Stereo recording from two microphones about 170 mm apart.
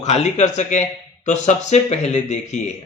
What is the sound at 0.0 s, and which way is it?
Speech, 40° left (ahead or behind).